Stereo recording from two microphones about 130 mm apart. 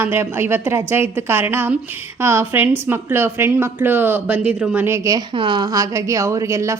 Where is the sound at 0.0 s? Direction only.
20° right (ahead or behind).